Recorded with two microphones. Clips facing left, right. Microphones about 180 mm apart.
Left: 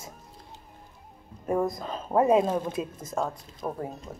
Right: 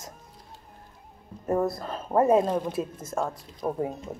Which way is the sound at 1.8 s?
5° right (ahead or behind).